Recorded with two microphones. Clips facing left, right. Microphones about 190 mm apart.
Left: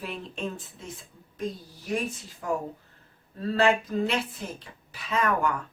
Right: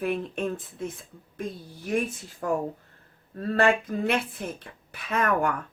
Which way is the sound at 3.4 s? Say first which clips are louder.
Right 1 dB; 55° right (ahead or behind).